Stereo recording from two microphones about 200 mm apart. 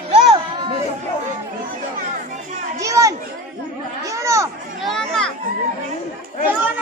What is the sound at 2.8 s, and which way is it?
Children playing, 15° right (ahead or behind).